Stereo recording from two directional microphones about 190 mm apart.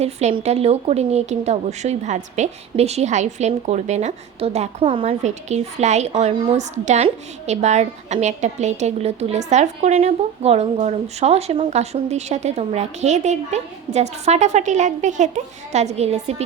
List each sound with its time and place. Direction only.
0.0 s speech: 35° right (ahead or behind)